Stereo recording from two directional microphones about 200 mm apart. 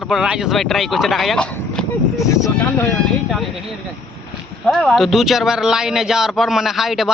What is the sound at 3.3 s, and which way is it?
Speech, centre (ahead or behind).